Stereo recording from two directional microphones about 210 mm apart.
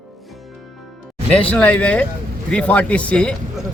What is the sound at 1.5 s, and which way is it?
A man's voice, 5° left (ahead or behind).